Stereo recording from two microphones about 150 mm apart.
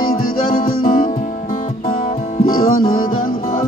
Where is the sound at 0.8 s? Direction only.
65° left (ahead or behind).